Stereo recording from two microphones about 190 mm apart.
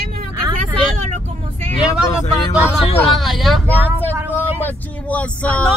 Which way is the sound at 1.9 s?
15° left (ahead or behind).